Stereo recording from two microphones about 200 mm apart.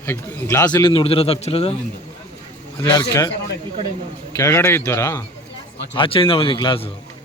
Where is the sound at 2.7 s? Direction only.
25° left (ahead or behind).